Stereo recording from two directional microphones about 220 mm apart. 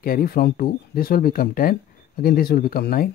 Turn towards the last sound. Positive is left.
turn(degrees=45)  # may be behind; listen again after turning